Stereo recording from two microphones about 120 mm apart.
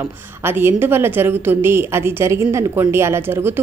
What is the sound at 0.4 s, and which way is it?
Speech, 20° right (ahead or behind).